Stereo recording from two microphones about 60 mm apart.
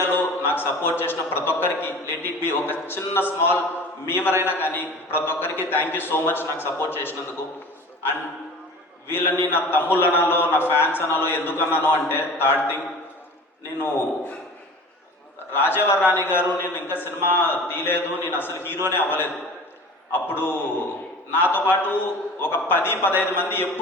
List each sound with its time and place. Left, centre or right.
0.0 s a man's voice: left
9.0 s a man's voice: left
15.5 s a man's voice: left